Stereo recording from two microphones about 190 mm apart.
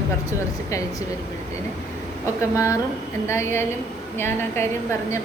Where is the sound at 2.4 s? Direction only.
15° left (ahead or behind).